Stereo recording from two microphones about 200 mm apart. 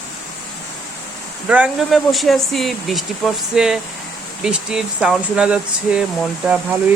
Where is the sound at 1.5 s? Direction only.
5° right (ahead or behind).